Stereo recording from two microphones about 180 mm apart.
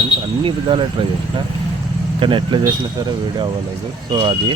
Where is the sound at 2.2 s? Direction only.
25° right (ahead or behind).